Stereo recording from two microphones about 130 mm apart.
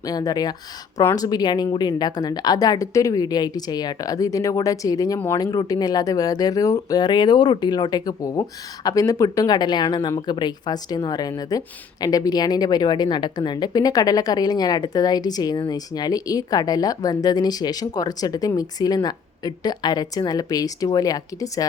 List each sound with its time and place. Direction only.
0.0 s a woman's voice: 30° left (ahead or behind)